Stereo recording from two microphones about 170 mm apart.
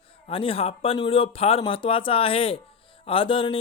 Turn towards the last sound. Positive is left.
turn(degrees=30)  # may be behind; listen again after turning